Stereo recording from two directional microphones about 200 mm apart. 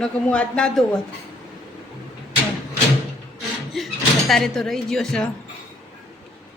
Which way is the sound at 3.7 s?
Centre (ahead or behind).